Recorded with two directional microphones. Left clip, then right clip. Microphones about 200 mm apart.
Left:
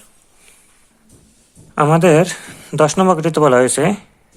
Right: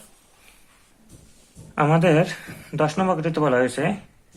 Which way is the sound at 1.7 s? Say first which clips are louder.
Left 7 dB; 25° left (ahead or behind).